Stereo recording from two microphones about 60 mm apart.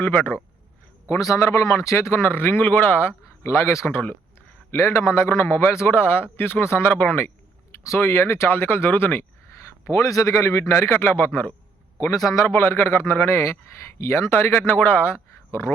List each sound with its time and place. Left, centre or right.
0.0 s speech: left
1.2 s speech: left
7.9 s speech: left
9.8 s speech: left
11.9 s a man's voice: left
12.5 s speech: left
14.7 s speech: left